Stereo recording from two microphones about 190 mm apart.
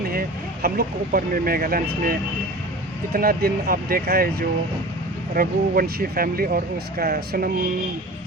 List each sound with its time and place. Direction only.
0.1 s speech: 50° right (ahead or behind)